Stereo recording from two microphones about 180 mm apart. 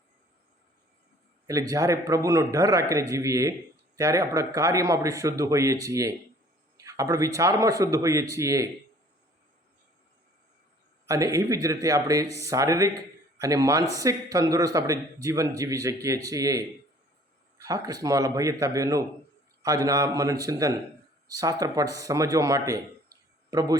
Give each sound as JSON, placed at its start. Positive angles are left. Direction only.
{"t": 1.5, "sound": "a man's voice", "side_deg": -20}
{"t": 11.1, "sound": "a man's voice", "side_deg": -20}